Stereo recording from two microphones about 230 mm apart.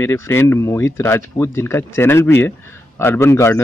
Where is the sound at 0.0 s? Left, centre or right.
Centre.